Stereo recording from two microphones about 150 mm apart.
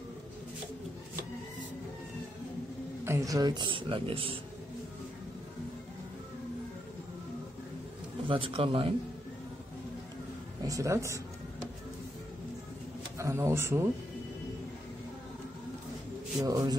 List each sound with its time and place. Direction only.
3.1 s speech: 20° right (ahead or behind); by 4.4 s 35° right (ahead or behind)
8.3 s speech: 35° right (ahead or behind)
10.6 s speech: 20° right (ahead or behind)
13.2 s speech: 20° right (ahead or behind)
16.3 s speech: 25° right (ahead or behind)